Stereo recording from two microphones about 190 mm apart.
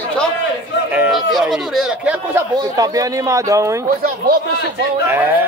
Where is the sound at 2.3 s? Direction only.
15° right (ahead or behind).